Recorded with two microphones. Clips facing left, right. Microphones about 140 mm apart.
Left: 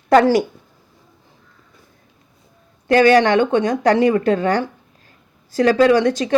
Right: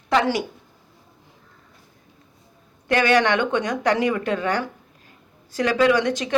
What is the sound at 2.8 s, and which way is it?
Speech, 35° left (ahead or behind).